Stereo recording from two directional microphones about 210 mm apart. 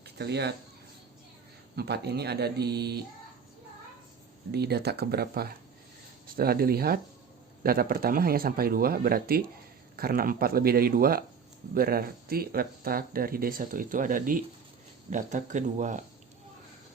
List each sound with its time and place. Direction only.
0.0 s speech: 50° right (ahead or behind)
1.7 s speech: 50° right (ahead or behind)
4.5 s speech: 50° right (ahead or behind)